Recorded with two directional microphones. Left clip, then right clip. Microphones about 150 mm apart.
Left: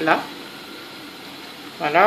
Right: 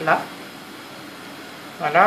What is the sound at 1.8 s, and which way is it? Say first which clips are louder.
Speech: even; 40° left (ahead or behind).